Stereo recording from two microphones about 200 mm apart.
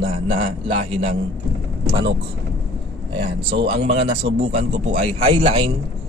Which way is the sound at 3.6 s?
30° right (ahead or behind).